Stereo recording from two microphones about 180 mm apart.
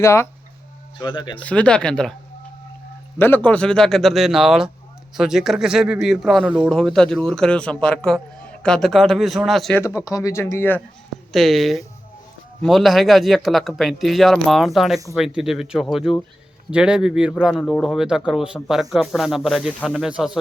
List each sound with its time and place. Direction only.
0.0 s speech: 15° left (ahead or behind)
1.4 s a man's voice: 5° left (ahead or behind)
3.2 s a man's voice: 10° left (ahead or behind)
9.8 s speech: 20° left (ahead or behind)
11.3 s a man's voice: centre (ahead or behind)